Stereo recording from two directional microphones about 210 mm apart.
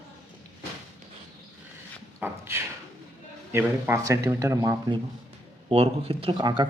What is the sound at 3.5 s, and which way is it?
Speech, 10° right (ahead or behind).